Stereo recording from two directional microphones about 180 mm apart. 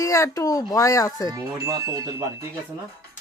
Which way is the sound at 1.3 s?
20° right (ahead or behind).